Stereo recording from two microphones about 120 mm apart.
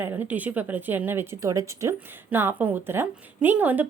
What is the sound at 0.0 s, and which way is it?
A woman's voice, 15° right (ahead or behind).